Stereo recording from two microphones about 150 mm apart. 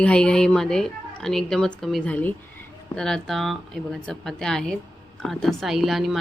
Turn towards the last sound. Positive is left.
turn(degrees=0)  # may be behind; listen again after turning